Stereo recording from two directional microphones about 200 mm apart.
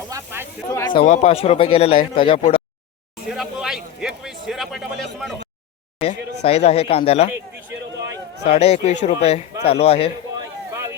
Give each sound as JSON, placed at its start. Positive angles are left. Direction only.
{"t": 0.1, "sound": "snake", "side_deg": -10}
{"t": 0.7, "sound": "speech", "side_deg": 20}
{"t": 1.0, "sound": "speech", "side_deg": 35}
{"t": 3.2, "sound": "a sound", "side_deg": 0}
{"t": 6.0, "sound": "speech", "side_deg": 30}
{"t": 8.4, "sound": "speech", "side_deg": 30}
{"t": 10.7, "sound": "a sound", "side_deg": -15}